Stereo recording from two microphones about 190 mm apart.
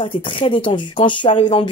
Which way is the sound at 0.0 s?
25° left (ahead or behind).